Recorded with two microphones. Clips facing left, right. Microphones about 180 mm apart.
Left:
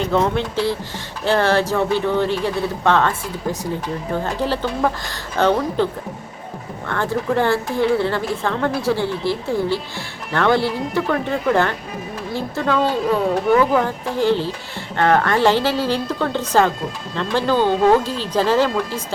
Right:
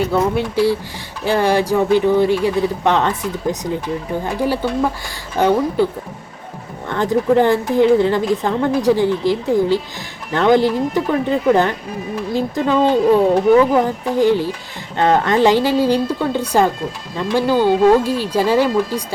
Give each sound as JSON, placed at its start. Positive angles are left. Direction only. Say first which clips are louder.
{"t": 0.0, "sound": "speech", "louder": "right 2 dB", "side_deg": -10}
{"t": 13.8, "sound": "speech", "louder": "right 4 dB", "side_deg": -15}